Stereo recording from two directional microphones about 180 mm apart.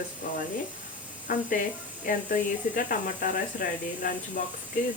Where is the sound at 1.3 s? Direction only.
50° left (ahead or behind).